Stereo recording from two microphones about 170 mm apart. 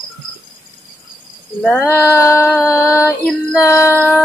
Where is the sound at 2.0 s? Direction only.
15° left (ahead or behind).